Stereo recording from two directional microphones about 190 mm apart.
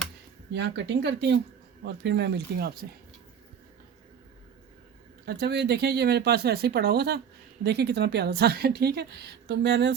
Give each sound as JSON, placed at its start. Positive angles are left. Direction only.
{"t": 0.5, "sound": "speech", "side_deg": -70}
{"t": 5.2, "sound": "speech", "side_deg": -55}